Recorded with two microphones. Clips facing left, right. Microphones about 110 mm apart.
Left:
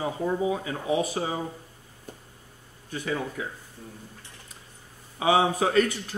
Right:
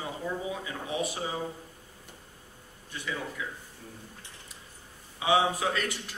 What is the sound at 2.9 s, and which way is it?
Speech, 40° left (ahead or behind).